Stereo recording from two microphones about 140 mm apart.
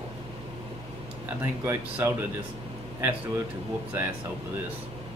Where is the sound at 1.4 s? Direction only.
15° right (ahead or behind).